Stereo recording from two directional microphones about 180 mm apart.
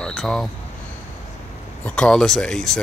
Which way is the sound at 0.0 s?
5° left (ahead or behind).